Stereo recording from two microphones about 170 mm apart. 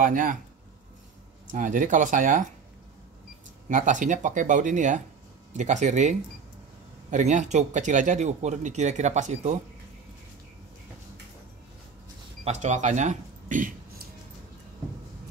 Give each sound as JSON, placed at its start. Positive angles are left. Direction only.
{"t": 0.0, "sound": "speech", "side_deg": -50}
{"t": 1.5, "sound": "speech", "side_deg": -50}
{"t": 3.6, "sound": "speech", "side_deg": -50}
{"t": 12.4, "sound": "speech", "side_deg": -40}